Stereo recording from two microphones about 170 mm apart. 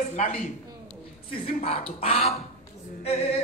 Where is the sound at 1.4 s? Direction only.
35° left (ahead or behind).